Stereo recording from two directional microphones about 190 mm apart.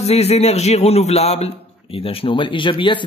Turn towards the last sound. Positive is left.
turn(degrees=25)  # may be behind; listen again after turning